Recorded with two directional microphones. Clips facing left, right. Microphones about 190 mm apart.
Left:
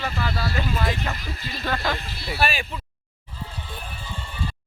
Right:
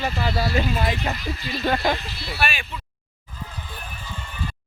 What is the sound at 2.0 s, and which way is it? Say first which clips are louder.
Speech: left 2 dB; 45° left (ahead or behind).